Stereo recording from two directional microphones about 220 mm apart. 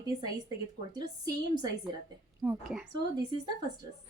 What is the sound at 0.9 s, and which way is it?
Speech, 20° right (ahead or behind).